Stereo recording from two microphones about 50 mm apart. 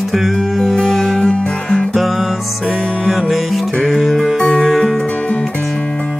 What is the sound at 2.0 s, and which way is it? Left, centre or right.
Music, centre.